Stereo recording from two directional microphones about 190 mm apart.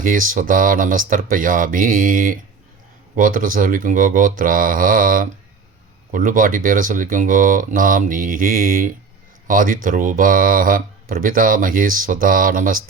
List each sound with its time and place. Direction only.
0.0 s speech: 45° right (ahead or behind)